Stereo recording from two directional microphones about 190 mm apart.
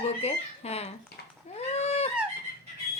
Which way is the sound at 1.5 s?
35° left (ahead or behind).